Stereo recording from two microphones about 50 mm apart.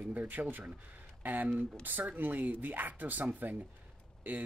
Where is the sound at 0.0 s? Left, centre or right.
Right.